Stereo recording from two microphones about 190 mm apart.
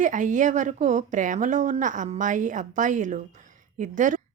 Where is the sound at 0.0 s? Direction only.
40° right (ahead or behind).